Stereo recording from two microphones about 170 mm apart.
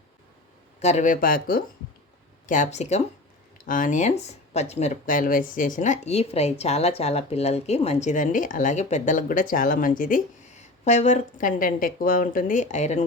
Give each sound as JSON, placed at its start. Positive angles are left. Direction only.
{"t": 0.8, "sound": "speech", "side_deg": 40}
{"t": 2.5, "sound": "speech", "side_deg": 45}